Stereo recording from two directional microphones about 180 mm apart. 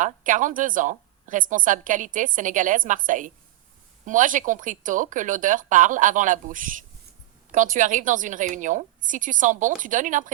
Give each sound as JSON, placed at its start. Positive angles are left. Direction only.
{"t": 0.0, "sound": "a woman's voice", "side_deg": -45}